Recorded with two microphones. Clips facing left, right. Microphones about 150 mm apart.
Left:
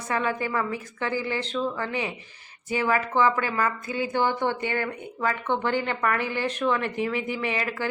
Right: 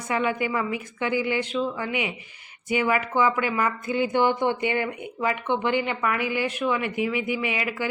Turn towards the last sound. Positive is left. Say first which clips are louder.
# even
turn(degrees=-10)  # may be behind; listen again after turning